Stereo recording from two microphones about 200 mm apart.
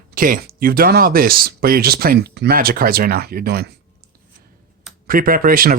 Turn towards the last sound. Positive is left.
turn(degrees=-45)  # may be behind; listen again after turning